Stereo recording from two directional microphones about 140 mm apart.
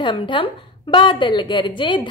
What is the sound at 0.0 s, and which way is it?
A woman's voice, 35° left (ahead or behind).